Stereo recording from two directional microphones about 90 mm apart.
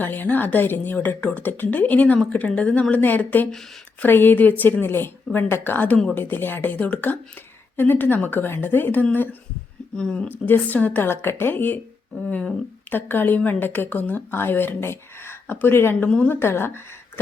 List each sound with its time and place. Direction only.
0.0 s speech: 20° left (ahead or behind)
10.0 s speech: 10° left (ahead or behind)
10.2 s speech: 25° left (ahead or behind)
12.3 s speech: 10° left (ahead or behind)
12.9 s speech: 20° left (ahead or behind)
16.0 s speech: 10° left (ahead or behind)
16.3 s speech: 25° left (ahead or behind)